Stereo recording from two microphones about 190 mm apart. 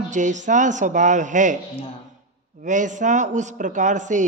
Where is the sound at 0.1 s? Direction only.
40° right (ahead or behind).